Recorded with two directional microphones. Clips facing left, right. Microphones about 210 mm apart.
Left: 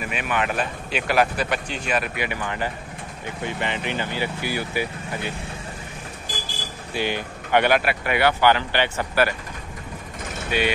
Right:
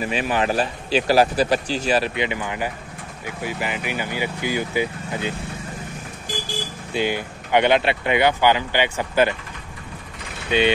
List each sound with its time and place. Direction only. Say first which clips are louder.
0.0 s speech: right 4 dB; 30° right (ahead or behind)
6.9 s speech: right 3 dB; 15° right (ahead or behind)
10.5 s speech: right 4 dB; 20° right (ahead or behind)